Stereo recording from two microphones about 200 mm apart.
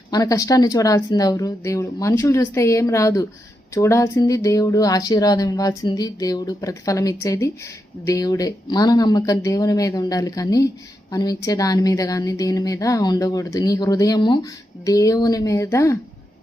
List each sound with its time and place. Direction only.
0.1 s speech: 15° left (ahead or behind)